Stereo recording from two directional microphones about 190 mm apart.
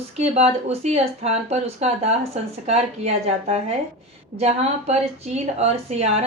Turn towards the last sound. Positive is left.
turn(degrees=-35)  # may be behind; listen again after turning